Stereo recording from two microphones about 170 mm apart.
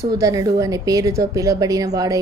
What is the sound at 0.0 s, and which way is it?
A woman's voice, 20° right (ahead or behind).